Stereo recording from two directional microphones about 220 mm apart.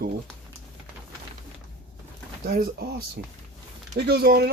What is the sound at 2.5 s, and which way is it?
Speech, 40° right (ahead or behind).